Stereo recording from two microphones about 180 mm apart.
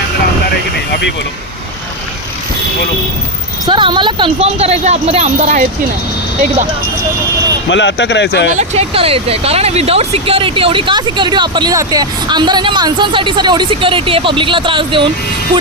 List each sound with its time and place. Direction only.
3.7 s speech: 25° right (ahead or behind)
7.7 s speech: 85° left
8.5 s speech: 35° right (ahead or behind)